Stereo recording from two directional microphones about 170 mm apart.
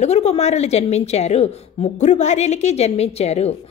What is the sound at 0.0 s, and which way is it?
A woman's voice, 40° left (ahead or behind).